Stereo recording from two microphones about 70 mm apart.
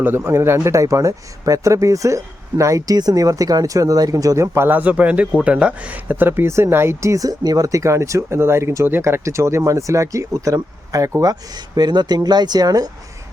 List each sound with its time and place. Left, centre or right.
0.3 s speech: right
4.5 s speech: right
4.8 s speech: right